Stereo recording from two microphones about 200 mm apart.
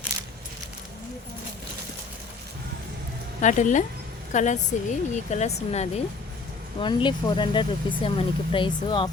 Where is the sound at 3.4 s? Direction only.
40° left (ahead or behind).